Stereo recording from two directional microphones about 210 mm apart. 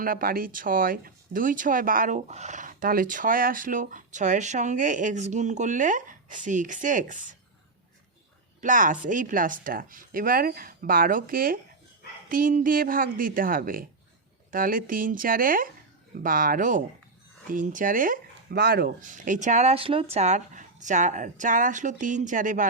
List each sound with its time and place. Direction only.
0.0 s speech: 40° right (ahead or behind)
8.6 s speech: 40° right (ahead or behind)